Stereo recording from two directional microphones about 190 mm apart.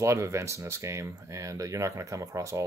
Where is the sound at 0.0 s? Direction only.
15° right (ahead or behind).